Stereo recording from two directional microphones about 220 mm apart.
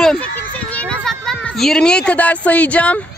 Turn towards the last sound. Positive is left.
turn(degrees=5)  # may be behind; listen again after turning